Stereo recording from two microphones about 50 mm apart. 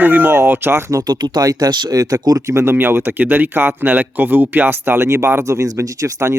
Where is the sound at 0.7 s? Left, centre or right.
Right.